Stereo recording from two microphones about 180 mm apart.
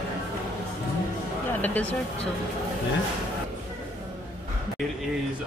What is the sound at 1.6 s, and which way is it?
Speech, 10° left (ahead or behind).